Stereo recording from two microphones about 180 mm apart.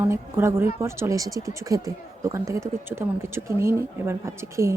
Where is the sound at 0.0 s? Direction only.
15° right (ahead or behind).